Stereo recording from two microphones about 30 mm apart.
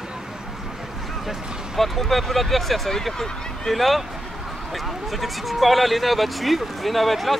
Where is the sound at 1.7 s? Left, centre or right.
Centre.